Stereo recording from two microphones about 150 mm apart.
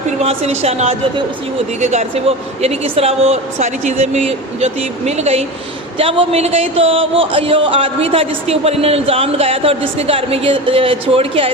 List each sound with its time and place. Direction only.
0.2 s speech: 45° right (ahead or behind)